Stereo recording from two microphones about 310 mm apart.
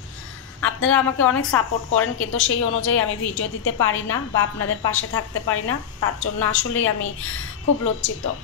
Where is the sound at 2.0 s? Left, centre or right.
Left.